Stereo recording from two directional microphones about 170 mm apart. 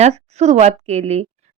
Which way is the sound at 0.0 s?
40° right (ahead or behind).